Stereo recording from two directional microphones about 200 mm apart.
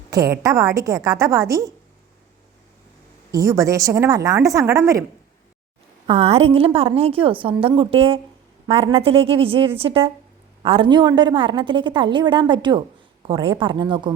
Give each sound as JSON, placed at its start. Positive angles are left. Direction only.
{"t": 0.1, "sound": "a woman's voice", "side_deg": -15}
{"t": 3.3, "sound": "a woman's voice", "side_deg": -15}
{"t": 6.1, "sound": "a woman's voice", "side_deg": -30}